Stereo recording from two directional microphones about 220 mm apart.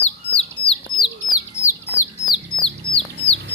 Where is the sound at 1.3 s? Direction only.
10° left (ahead or behind).